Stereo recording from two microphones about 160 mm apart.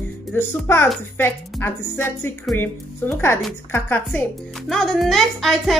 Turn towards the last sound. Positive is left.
turn(degrees=0)  # may be behind; listen again after turning